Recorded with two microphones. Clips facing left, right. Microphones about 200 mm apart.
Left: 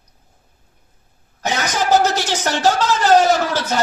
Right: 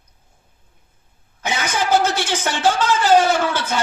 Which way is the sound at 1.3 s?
40° left (ahead or behind).